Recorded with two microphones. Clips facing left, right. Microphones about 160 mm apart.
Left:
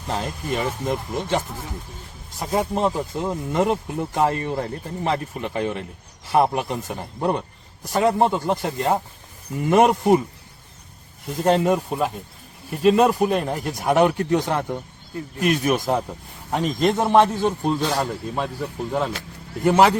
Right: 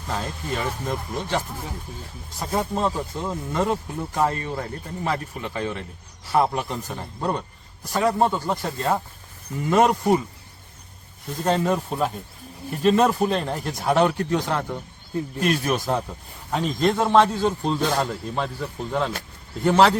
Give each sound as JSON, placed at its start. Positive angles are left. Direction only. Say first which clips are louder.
{"t": 0.1, "sound": "a man's voice", "louder": "left 3 dB", "side_deg": 20}
{"t": 11.4, "sound": "a man's voice", "louder": "left 3 dB", "side_deg": 15}
{"t": 11.9, "sound": "a man's voice", "louder": "left 1 dB", "side_deg": 5}